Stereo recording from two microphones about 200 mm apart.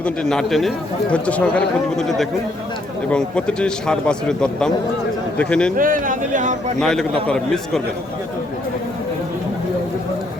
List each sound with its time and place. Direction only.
0.0 s a man's voice: centre (ahead or behind)
5.7 s speech: 45° right (ahead or behind)
6.7 s a man's voice: centre (ahead or behind)